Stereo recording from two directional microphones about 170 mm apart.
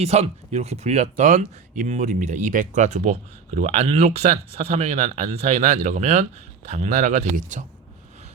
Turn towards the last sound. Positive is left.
turn(degrees=-45)  # may be behind; listen again after turning